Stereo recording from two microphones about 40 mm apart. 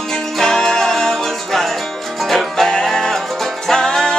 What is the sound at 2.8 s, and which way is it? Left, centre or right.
Music, centre.